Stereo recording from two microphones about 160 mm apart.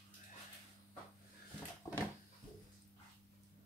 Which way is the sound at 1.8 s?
20° left (ahead or behind).